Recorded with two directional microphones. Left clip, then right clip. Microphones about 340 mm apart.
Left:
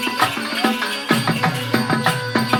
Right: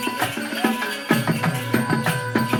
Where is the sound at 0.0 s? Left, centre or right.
Centre.